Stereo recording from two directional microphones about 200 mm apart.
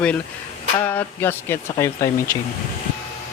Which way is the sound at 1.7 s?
15° left (ahead or behind).